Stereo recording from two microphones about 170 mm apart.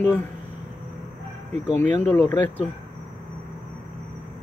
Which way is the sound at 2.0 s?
10° left (ahead or behind).